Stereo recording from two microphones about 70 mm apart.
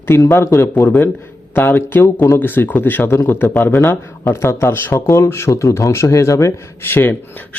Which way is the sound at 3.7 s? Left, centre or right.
Left.